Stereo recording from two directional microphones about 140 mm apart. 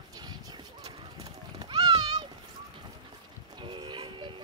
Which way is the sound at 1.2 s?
30° right (ahead or behind).